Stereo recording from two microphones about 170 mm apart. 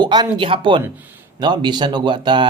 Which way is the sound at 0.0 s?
25° right (ahead or behind).